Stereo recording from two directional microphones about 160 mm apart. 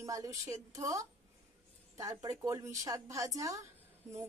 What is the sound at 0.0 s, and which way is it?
A woman's voice, 20° right (ahead or behind).